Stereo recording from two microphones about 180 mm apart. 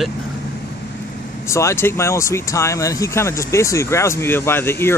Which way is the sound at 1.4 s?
15° left (ahead or behind).